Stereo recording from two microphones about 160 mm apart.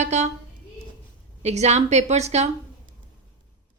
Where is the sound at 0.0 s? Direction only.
45° right (ahead or behind).